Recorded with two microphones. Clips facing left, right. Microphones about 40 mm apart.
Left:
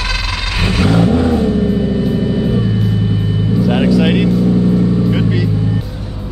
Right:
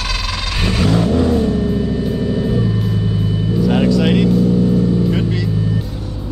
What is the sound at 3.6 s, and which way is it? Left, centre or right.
Music, centre.